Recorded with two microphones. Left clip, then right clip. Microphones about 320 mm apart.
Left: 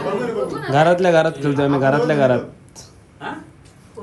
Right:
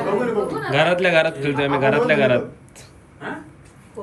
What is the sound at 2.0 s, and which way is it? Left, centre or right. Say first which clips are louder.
Speech: left 1 dB; centre.